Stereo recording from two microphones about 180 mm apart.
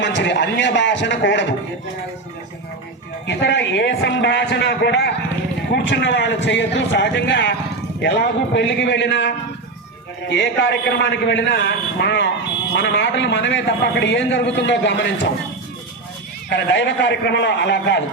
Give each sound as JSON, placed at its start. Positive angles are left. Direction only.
{"t": 0.0, "sound": "a man's voice", "side_deg": 80}
{"t": 3.2, "sound": "a man's voice", "side_deg": 75}
{"t": 16.5, "sound": "a man's voice", "side_deg": 75}